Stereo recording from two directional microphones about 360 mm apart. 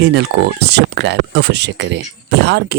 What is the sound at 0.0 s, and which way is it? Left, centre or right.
Speech, right.